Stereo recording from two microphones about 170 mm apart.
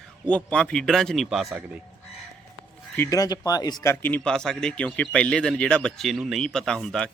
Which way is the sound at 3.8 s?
10° left (ahead or behind).